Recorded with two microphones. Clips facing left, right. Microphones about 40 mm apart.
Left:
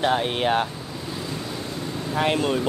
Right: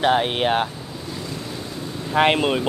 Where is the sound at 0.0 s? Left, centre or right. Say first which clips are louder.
Right 3 dB; right.